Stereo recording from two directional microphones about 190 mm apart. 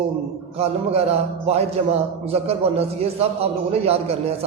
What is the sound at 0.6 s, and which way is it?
A man's voice, 30° right (ahead or behind).